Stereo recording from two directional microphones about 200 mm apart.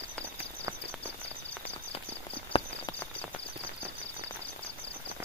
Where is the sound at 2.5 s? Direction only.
30° left (ahead or behind).